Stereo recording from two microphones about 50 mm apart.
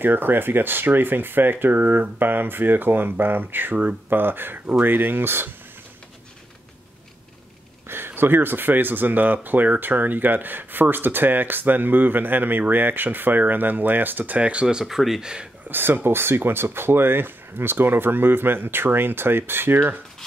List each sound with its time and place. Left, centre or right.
0.0 s speech: right
7.9 s speech: right
14.4 s speech: right; by 15.2 s centre
15.7 s speech: right